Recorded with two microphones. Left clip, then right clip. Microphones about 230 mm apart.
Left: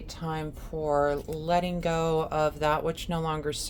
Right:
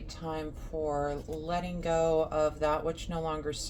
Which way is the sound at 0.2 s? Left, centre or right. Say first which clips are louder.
Left 2 dB; left.